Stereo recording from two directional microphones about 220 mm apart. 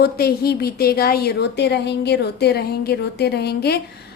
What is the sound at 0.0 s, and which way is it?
A woman's voice, 45° left (ahead or behind).